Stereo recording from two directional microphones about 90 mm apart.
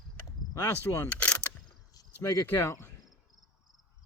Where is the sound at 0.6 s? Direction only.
35° left (ahead or behind).